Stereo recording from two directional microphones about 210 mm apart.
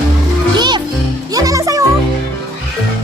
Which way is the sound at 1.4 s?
15° right (ahead or behind).